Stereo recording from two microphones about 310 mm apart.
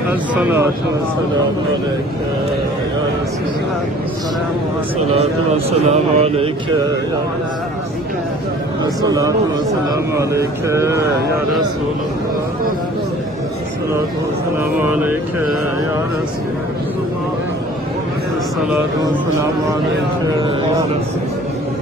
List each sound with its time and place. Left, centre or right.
0.1 s speech: centre
5.1 s speech: centre
8.8 s speech: centre
14.8 s speech: centre